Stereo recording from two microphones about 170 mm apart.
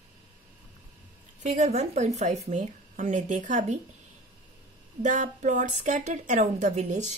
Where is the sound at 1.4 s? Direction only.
40° right (ahead or behind).